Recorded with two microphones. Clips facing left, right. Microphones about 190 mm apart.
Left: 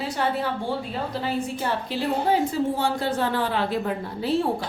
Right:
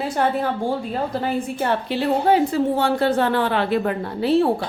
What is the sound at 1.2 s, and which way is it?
A woman's voice, 60° right (ahead or behind).